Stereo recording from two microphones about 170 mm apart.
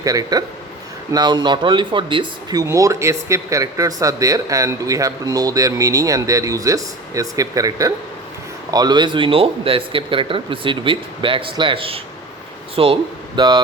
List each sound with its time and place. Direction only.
0.0 s speech: 20° right (ahead or behind)